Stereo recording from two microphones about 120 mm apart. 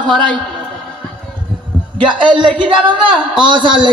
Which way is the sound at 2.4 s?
45° right (ahead or behind).